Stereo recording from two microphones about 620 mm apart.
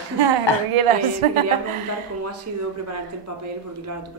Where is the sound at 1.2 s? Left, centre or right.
Right.